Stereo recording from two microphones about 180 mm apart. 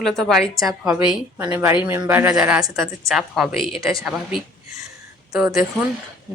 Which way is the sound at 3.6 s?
30° left (ahead or behind).